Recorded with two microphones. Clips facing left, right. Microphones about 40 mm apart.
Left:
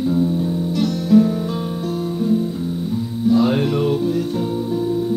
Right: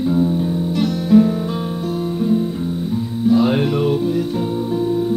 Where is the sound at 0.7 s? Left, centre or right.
Right.